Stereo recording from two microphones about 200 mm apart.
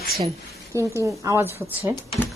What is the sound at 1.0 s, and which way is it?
Speech, 15° right (ahead or behind).